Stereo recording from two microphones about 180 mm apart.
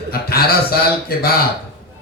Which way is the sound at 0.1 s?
60° left (ahead or behind).